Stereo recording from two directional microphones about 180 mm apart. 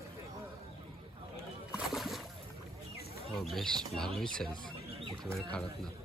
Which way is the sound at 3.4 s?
Centre (ahead or behind).